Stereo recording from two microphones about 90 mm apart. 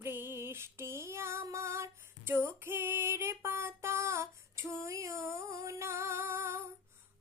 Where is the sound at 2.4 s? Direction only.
25° right (ahead or behind).